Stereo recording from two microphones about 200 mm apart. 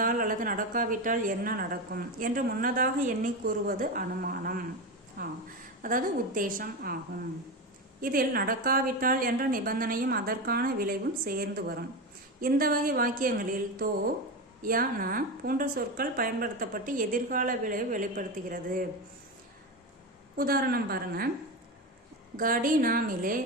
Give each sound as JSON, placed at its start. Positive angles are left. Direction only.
{"t": 0.0, "sound": "a woman's voice", "side_deg": -45}
{"t": 8.0, "sound": "a woman's voice", "side_deg": -45}
{"t": 20.4, "sound": "a woman's voice", "side_deg": -50}
{"t": 22.4, "sound": "a woman's voice", "side_deg": -45}